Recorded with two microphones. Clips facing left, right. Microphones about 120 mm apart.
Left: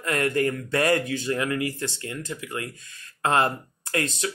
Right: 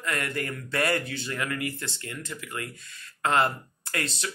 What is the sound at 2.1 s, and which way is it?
Speech, 35° left (ahead or behind).